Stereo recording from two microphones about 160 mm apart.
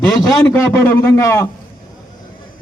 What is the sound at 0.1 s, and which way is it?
A man's voice, 20° left (ahead or behind).